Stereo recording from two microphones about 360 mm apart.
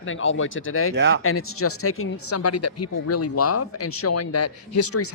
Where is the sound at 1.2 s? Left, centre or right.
Left.